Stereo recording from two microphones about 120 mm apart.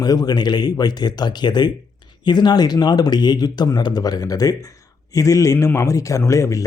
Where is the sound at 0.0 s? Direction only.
35° left (ahead or behind).